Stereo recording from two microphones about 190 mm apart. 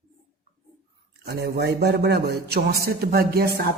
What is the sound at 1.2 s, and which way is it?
A man's voice, 60° right (ahead or behind).